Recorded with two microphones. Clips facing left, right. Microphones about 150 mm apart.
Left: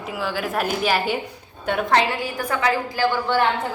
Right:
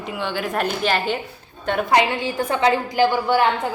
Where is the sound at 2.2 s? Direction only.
25° right (ahead or behind).